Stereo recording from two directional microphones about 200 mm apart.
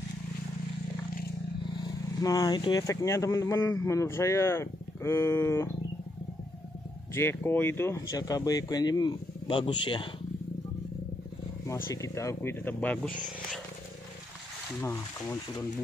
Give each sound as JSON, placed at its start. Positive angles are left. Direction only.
{"t": 1.8, "sound": "speech", "side_deg": 20}
{"t": 7.2, "sound": "speech", "side_deg": 10}
{"t": 11.6, "sound": "speech", "side_deg": 15}
{"t": 14.8, "sound": "speech", "side_deg": 10}